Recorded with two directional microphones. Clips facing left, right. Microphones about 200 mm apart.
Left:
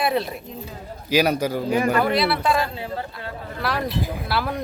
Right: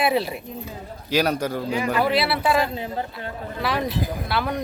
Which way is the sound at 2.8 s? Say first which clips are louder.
Right 1 dB; 20° right (ahead or behind).